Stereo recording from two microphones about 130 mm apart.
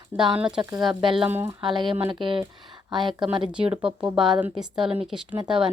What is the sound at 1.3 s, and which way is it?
Speech, 15° right (ahead or behind).